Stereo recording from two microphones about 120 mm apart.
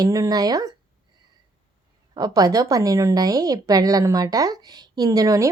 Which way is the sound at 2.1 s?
30° right (ahead or behind).